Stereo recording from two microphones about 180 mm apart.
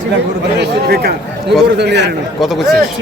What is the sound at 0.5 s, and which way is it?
Speech, 65° right (ahead or behind).